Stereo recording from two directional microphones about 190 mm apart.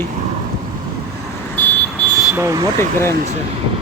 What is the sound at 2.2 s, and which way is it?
Speech, 15° right (ahead or behind).